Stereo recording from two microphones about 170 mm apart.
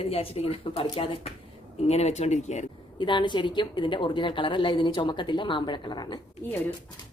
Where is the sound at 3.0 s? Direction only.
25° left (ahead or behind).